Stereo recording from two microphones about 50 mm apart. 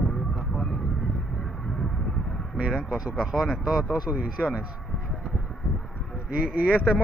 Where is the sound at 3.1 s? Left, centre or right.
Centre.